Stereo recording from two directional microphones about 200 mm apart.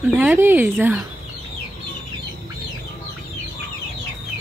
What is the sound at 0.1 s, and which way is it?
Speech, 10° right (ahead or behind).